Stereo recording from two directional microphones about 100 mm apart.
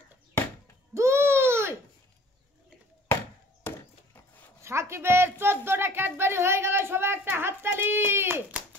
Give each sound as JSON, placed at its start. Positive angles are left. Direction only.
{"t": 0.9, "sound": "a sound", "side_deg": -25}
{"t": 3.6, "sound": "wood", "side_deg": 25}
{"t": 4.6, "sound": "a woman's voice", "side_deg": -25}